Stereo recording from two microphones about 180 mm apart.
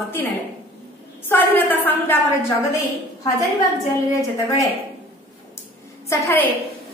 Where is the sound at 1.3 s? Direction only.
10° left (ahead or behind).